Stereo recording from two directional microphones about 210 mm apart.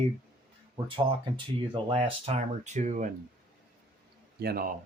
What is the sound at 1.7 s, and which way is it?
Speech, 25° right (ahead or behind).